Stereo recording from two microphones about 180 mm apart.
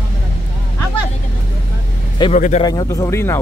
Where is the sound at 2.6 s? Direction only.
20° left (ahead or behind).